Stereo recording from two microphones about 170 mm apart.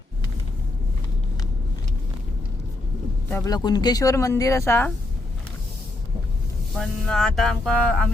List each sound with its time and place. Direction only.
3.2 s a man's voice: 10° left (ahead or behind)
3.5 s speech: 25° left (ahead or behind)
6.7 s music: centre (ahead or behind)